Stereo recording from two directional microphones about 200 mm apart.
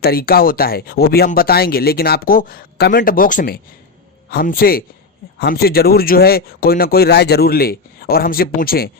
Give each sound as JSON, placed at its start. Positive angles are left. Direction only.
{"t": 0.0, "sound": "speech", "side_deg": 50}